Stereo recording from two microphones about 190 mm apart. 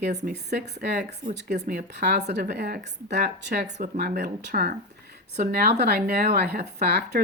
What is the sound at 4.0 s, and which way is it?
Speech, 55° right (ahead or behind).